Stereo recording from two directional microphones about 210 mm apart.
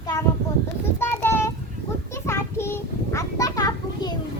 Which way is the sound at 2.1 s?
15° left (ahead or behind).